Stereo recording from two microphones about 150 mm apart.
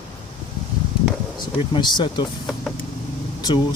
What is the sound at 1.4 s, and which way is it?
Speech, 30° left (ahead or behind).